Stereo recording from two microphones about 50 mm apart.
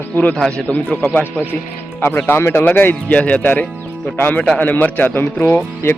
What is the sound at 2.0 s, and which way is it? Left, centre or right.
Speech, left.